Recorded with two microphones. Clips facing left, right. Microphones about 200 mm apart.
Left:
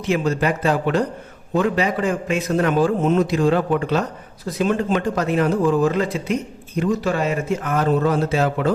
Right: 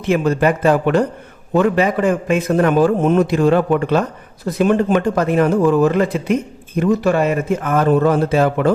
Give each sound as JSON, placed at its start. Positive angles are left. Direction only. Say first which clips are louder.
{"t": 0.1, "sound": "a man's voice", "louder": "right 5 dB", "side_deg": -55}